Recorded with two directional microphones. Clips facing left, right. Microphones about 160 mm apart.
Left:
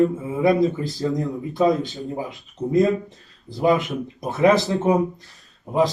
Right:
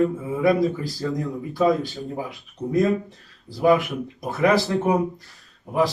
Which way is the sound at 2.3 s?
20° left (ahead or behind).